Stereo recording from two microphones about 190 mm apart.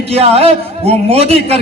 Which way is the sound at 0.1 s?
30° right (ahead or behind).